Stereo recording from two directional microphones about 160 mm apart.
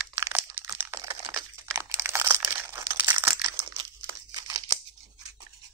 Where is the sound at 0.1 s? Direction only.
15° right (ahead or behind).